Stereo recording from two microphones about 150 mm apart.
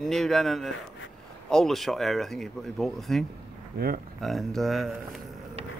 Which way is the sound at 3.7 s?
90° right.